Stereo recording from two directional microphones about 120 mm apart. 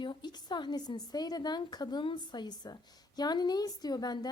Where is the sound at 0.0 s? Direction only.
40° left (ahead or behind).